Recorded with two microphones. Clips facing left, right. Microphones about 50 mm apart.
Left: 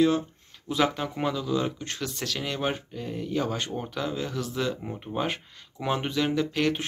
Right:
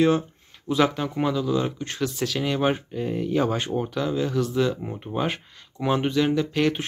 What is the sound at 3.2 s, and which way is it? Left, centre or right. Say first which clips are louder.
Speech: right 5 dB; right.